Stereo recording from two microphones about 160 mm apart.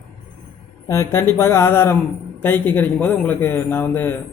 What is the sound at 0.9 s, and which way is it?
A man's voice, 15° left (ahead or behind).